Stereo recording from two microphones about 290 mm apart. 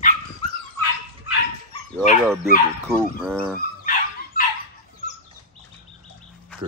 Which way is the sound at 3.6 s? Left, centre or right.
Left.